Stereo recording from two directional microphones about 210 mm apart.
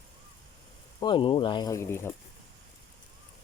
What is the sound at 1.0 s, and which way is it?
Speech, 20° left (ahead or behind).